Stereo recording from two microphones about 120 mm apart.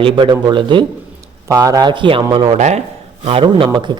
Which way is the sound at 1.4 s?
30° right (ahead or behind).